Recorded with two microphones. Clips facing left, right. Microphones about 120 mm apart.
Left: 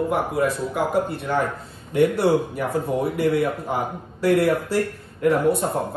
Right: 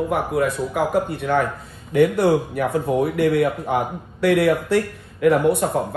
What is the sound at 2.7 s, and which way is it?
Speech, centre (ahead or behind).